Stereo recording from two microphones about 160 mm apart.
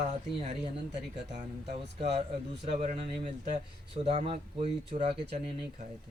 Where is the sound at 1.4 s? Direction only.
40° right (ahead or behind).